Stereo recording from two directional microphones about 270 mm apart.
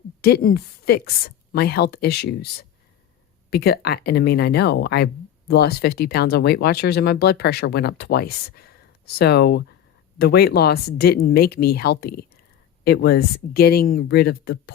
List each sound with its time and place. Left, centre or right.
0.2 s speech: left